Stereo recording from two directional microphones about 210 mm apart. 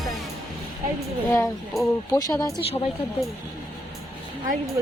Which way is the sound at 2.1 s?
20° left (ahead or behind).